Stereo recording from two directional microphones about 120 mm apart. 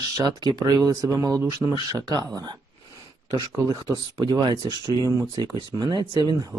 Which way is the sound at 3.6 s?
30° right (ahead or behind).